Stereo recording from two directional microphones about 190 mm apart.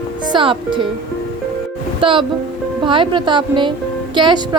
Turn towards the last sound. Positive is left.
turn(degrees=-25)  # may be behind; listen again after turning